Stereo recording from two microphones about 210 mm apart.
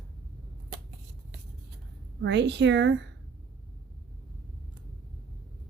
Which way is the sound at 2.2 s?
55° right (ahead or behind).